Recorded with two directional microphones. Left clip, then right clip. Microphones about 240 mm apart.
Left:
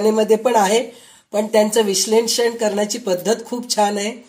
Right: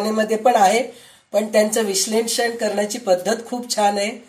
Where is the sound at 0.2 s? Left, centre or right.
Left.